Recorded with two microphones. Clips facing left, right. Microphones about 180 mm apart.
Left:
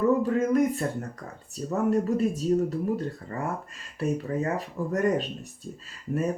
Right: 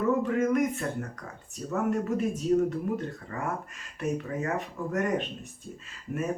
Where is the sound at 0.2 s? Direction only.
35° left (ahead or behind).